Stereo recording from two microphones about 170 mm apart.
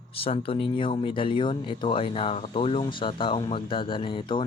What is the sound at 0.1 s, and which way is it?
Speech, 35° left (ahead or behind).